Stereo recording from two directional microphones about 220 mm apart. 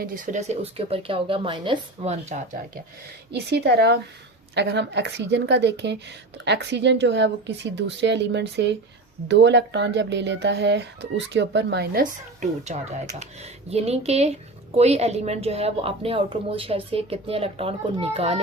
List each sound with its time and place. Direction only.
0.0 s a woman's voice: 35° right (ahead or behind)
3.3 s a woman's voice: 50° right (ahead or behind)
12.4 s a woman's voice: 30° right (ahead or behind)